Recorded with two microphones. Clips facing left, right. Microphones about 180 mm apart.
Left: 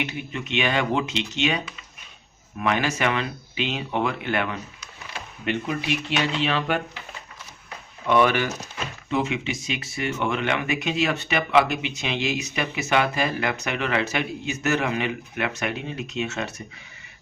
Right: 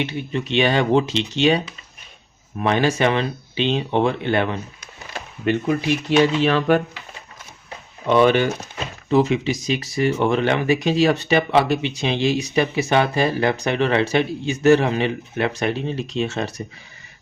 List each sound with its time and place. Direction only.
0.0 s speech: 30° right (ahead or behind)
8.0 s speech: 30° right (ahead or behind)